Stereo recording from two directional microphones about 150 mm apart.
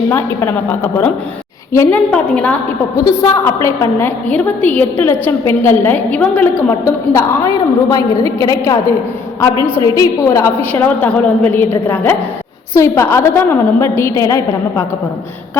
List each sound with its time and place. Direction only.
0.1 s a woman's voice: 15° left (ahead or behind)
2.1 s a woman's voice: 10° left (ahead or behind)
3.0 s a woman's voice: 25° left (ahead or behind)
9.7 s a woman's voice: 20° left (ahead or behind)